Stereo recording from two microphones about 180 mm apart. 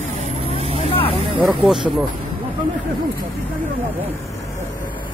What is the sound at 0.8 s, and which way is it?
Vehicle, 35° left (ahead or behind).